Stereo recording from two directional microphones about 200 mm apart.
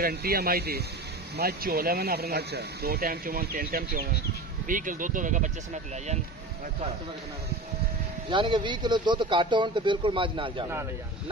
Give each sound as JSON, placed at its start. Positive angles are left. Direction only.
{"t": 0.0, "sound": "speech", "side_deg": -50}
{"t": 8.3, "sound": "speech", "side_deg": -25}